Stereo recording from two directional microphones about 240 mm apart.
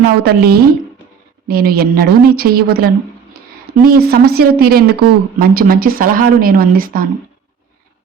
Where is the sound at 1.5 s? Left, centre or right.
Right.